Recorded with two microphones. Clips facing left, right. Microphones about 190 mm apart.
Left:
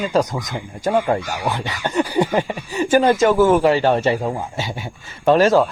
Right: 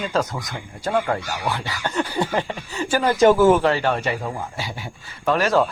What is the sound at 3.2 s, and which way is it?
Speech, 20° right (ahead or behind).